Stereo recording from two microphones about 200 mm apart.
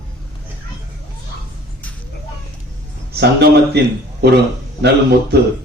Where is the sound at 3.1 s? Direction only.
55° right (ahead or behind).